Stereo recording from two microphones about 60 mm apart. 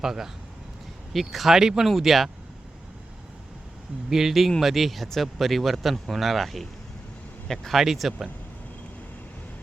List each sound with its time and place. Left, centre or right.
0.0 s speech: centre
4.1 s speech: centre